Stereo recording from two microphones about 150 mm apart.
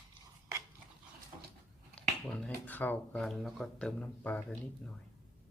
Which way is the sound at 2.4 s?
10° left (ahead or behind).